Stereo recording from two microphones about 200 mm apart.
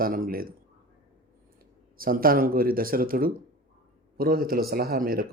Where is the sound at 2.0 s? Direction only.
45° right (ahead or behind).